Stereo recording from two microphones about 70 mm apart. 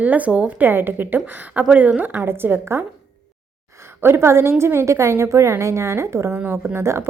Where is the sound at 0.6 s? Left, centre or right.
Right.